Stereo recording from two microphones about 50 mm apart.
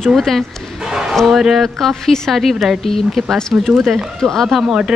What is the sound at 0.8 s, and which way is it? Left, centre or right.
Basketball bounce, centre.